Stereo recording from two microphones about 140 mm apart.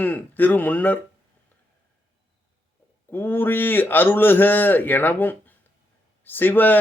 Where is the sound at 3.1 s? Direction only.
15° left (ahead or behind).